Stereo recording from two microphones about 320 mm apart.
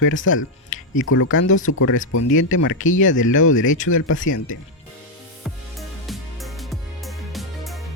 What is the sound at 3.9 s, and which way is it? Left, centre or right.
Speech, left.